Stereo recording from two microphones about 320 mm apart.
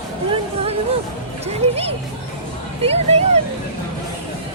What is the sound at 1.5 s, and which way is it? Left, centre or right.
Speech, centre.